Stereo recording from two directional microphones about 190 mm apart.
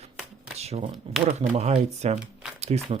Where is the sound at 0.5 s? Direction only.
35° right (ahead or behind).